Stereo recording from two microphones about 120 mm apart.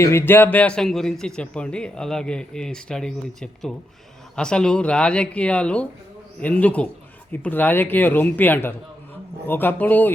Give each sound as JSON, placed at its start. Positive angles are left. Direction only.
{"t": 0.0, "sound": "a man's voice", "side_deg": 20}